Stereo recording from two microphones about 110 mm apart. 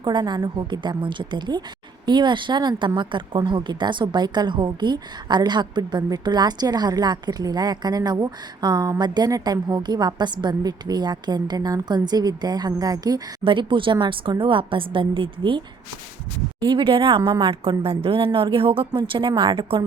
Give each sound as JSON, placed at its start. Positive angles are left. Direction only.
{"t": 0.0, "sound": "speech", "side_deg": -45}
{"t": 13.4, "sound": "a woman's voice", "side_deg": -50}